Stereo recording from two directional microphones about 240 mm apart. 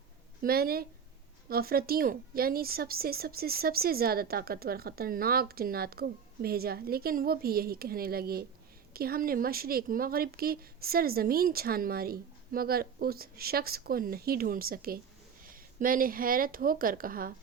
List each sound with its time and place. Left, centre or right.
0.4 s a woman's voice: right